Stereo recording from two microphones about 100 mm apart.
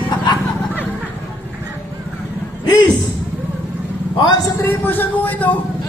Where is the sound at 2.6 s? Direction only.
45° left (ahead or behind).